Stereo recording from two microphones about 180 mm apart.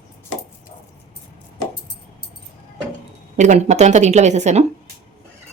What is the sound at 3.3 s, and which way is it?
A woman's voice, 40° right (ahead or behind).